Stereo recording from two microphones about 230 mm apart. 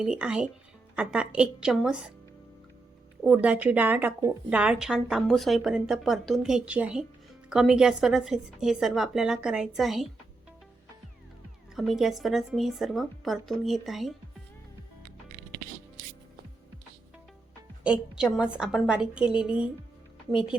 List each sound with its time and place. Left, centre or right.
0.0 s a woman's voice: centre
3.2 s a woman's voice: centre
11.7 s a woman's voice: centre
17.8 s a woman's voice: centre